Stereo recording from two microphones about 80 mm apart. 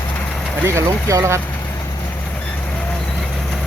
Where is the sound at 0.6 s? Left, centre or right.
Right.